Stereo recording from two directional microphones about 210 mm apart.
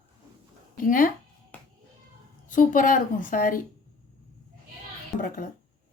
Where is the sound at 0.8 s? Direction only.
40° left (ahead or behind).